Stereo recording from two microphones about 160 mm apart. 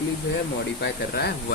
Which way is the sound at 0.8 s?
90° left.